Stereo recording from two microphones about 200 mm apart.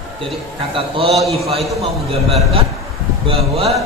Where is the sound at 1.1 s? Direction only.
Centre (ahead or behind).